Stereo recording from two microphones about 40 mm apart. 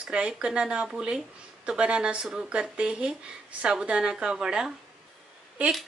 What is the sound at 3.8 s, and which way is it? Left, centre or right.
Speech, right.